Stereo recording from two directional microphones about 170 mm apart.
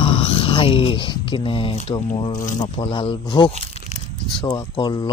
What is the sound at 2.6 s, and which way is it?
Speech, 30° left (ahead or behind).